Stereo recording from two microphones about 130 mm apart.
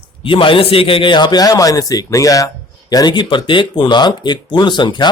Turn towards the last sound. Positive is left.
turn(degrees=35)  # may be behind; listen again after turning